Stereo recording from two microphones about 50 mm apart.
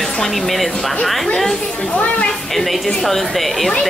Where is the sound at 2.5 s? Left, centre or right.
Centre.